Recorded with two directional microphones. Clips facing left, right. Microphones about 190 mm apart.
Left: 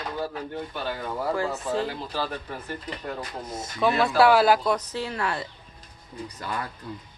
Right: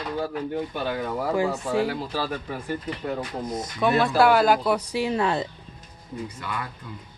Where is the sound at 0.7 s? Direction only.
10° right (ahead or behind).